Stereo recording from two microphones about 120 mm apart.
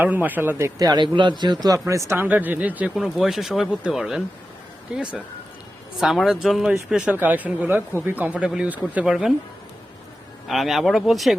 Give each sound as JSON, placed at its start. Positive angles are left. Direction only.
{"t": 0.0, "sound": "speech", "side_deg": -15}
{"t": 0.8, "sound": "a man's voice", "side_deg": -35}
{"t": 1.8, "sound": "speech", "side_deg": -25}
{"t": 6.0, "sound": "speech", "side_deg": 0}
{"t": 9.0, "sound": "speech", "side_deg": -5}
{"t": 10.4, "sound": "speech", "side_deg": 0}